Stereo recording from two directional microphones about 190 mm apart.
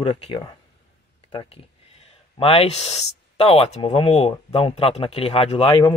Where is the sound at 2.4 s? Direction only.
30° left (ahead or behind).